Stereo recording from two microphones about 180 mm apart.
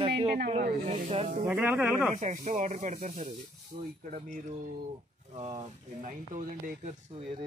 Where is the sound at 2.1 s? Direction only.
40° right (ahead or behind).